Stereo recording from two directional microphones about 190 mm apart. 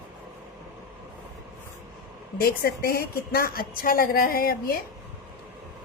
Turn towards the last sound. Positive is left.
turn(degrees=50)  # may be behind; listen again after turning